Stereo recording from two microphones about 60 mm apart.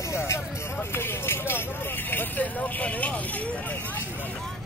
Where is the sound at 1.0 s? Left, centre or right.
Left.